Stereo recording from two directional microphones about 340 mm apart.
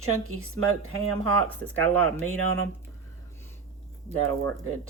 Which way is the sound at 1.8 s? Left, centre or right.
Right.